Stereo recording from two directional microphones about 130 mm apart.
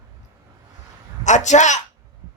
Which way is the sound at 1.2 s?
65° left (ahead or behind).